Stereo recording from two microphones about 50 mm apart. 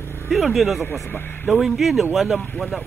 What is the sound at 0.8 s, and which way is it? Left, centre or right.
Speech, left.